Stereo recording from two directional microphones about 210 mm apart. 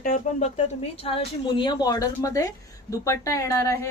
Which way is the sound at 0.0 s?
40° left (ahead or behind).